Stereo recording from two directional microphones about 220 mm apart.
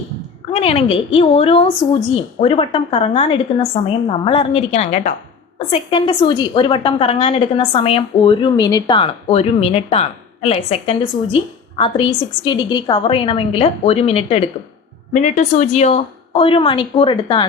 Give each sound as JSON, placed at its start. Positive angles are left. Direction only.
{"t": 0.5, "sound": "a woman's voice", "side_deg": 25}